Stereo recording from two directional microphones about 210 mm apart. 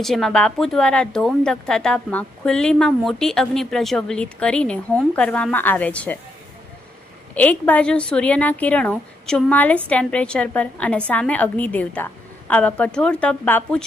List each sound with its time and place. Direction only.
0.0 s speech: centre (ahead or behind)
7.3 s a woman's voice: 5° left (ahead or behind)